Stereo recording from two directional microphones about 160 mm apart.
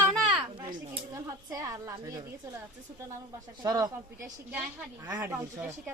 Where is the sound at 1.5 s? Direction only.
20° right (ahead or behind).